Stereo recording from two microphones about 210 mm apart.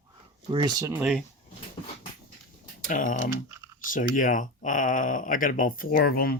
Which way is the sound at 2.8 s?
40° left (ahead or behind).